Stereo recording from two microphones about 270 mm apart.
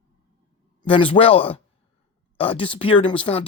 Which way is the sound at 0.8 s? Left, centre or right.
Centre.